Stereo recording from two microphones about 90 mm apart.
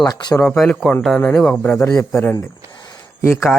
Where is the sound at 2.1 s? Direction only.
35° left (ahead or behind).